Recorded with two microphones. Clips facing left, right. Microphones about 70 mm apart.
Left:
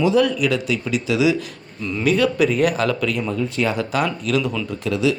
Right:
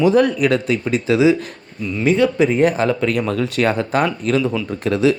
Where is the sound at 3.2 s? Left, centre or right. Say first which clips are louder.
Right 4 dB; right.